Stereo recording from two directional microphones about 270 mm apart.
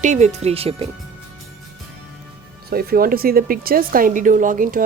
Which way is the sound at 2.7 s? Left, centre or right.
Right.